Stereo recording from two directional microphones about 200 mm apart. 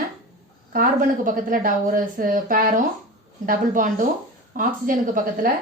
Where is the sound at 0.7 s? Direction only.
45° right (ahead or behind).